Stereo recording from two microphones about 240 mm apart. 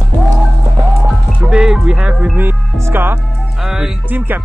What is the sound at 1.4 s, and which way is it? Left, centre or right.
Music, centre.